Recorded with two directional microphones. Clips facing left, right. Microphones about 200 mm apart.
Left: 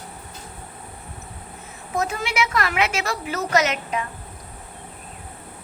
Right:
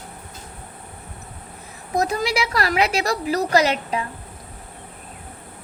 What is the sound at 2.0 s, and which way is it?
A woman's voice, 35° right (ahead or behind).